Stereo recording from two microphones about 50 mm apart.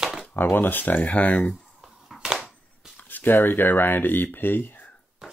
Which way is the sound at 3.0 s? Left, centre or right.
Left.